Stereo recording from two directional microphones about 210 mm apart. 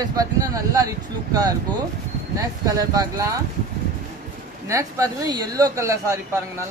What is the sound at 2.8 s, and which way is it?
Speech, 15° right (ahead or behind).